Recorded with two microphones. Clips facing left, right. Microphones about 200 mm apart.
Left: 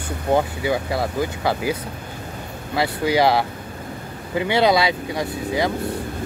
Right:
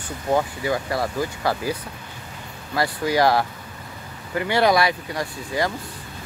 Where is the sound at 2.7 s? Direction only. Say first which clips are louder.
Left 2 dB; 25° left (ahead or behind).